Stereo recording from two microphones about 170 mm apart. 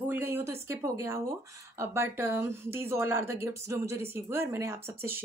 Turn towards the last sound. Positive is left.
turn(degrees=-15)  # may be behind; listen again after turning